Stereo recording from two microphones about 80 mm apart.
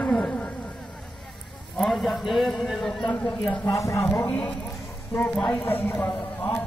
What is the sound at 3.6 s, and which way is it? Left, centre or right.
Speech, left.